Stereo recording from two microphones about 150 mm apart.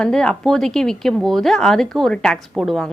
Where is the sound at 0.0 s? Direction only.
5° left (ahead or behind).